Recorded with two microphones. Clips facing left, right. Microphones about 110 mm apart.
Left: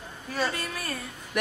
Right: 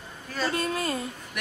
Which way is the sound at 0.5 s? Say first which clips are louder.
Right 6 dB; 25° right (ahead or behind).